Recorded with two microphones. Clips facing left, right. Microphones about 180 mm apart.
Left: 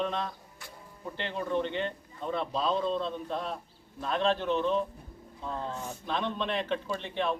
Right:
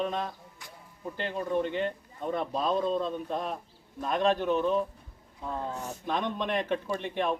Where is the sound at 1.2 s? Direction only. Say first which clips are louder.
Right 2 dB; 40° right (ahead or behind).